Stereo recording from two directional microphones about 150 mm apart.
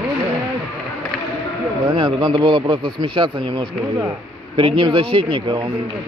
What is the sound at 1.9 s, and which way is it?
A man's voice, 35° right (ahead or behind).